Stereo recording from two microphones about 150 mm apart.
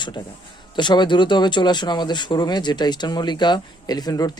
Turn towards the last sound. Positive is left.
turn(degrees=25)  # may be behind; listen again after turning